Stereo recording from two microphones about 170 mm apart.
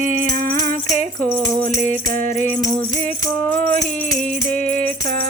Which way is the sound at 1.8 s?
50° right (ahead or behind).